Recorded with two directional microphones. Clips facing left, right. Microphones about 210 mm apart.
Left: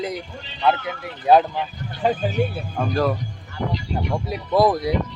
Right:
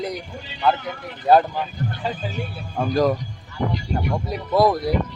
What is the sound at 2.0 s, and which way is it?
Speech, 55° left (ahead or behind).